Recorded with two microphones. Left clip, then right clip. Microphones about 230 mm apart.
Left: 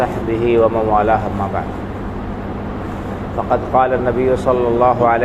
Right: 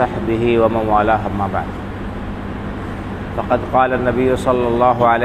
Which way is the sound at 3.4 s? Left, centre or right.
Right.